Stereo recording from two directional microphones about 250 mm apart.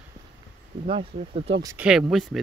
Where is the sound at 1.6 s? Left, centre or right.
Centre.